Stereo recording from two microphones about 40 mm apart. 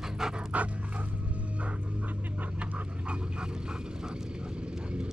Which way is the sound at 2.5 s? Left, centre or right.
Right.